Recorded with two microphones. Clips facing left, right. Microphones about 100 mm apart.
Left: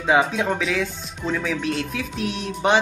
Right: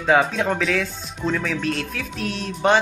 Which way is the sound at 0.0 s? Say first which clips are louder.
Right 1 dB; 10° left (ahead or behind).